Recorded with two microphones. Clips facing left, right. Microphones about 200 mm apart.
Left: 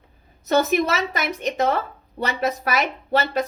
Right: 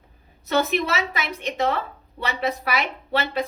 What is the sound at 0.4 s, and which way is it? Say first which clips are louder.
A woman's voice: left 3 dB; 45° left (ahead or behind).